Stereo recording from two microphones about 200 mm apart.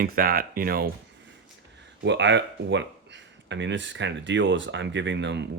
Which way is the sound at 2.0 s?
60° right (ahead or behind).